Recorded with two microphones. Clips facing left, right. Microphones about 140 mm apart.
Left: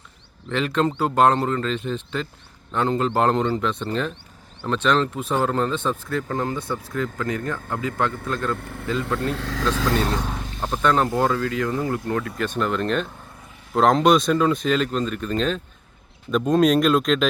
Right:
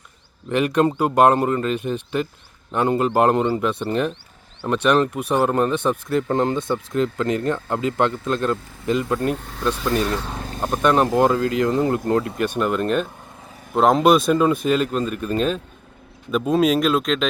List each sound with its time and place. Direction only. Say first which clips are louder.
0.4 s speech: right 4 dB; 15° right (ahead or behind)
8.5 s speech: left 6 dB; 60° left (ahead or behind)
8.9 s speech: right 4 dB; 20° right (ahead or behind)
9.3 s speech: even; 90° left
10.3 s vehicle: right 3 dB; 40° right (ahead or behind)
10.8 s speech: right 3 dB; 15° right (ahead or behind)
12.4 s speech: right 3 dB; 10° right (ahead or behind)